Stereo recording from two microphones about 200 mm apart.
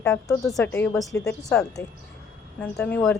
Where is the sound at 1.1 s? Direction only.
15° left (ahead or behind).